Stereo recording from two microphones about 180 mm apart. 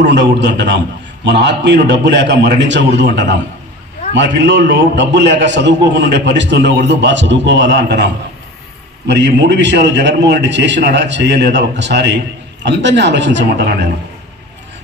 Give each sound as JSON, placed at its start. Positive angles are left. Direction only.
{"t": 0.1, "sound": "a man's voice", "side_deg": -80}